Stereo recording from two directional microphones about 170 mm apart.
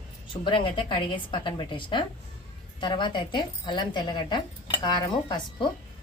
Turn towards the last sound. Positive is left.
turn(degrees=25)  # may be behind; listen again after turning